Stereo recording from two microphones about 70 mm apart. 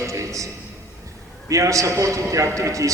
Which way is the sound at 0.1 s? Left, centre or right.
Right.